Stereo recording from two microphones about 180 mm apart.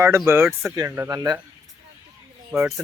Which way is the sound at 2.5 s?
15° right (ahead or behind).